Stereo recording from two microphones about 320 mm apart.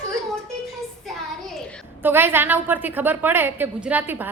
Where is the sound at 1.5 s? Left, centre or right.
Centre.